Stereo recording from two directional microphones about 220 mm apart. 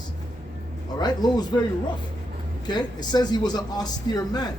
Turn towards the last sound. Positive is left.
turn(degrees=20)  # may be behind; listen again after turning